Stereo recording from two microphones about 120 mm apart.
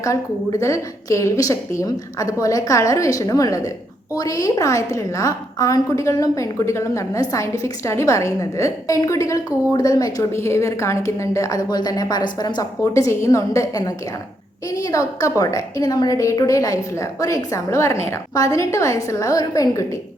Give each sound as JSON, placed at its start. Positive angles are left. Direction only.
{"t": 0.0, "sound": "a woman's voice", "side_deg": 25}